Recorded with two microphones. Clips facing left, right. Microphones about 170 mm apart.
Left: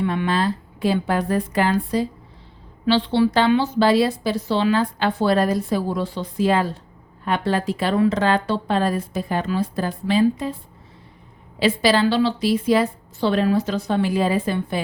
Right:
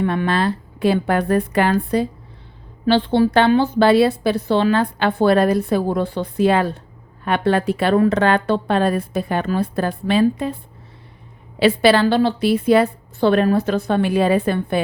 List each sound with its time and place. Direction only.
0.0 s a woman's voice: 55° right (ahead or behind)
2.8 s a woman's voice: 50° right (ahead or behind)
11.6 s a woman's voice: 65° right (ahead or behind)